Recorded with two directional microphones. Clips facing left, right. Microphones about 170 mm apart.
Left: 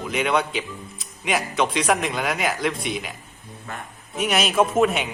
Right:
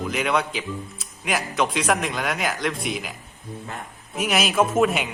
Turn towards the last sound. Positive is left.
turn(degrees=0)  # may be behind; listen again after turning